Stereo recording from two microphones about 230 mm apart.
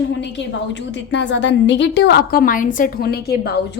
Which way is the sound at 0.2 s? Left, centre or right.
Left.